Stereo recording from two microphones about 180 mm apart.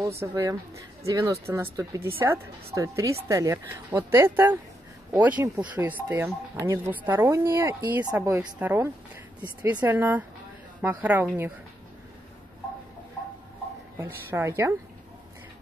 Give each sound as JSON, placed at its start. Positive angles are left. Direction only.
{"t": 0.2, "sound": "speech", "side_deg": -20}
{"t": 13.9, "sound": "speech", "side_deg": -15}